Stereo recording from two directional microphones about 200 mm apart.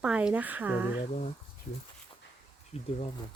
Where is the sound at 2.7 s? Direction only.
30° left (ahead or behind).